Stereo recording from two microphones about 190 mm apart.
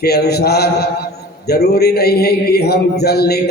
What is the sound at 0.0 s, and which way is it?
A man's voice, 60° left (ahead or behind).